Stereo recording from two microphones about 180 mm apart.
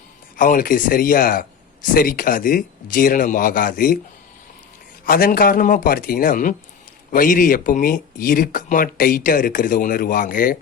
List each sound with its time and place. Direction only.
0.3 s speech: 50° left (ahead or behind)
5.0 s speech: 55° left (ahead or behind)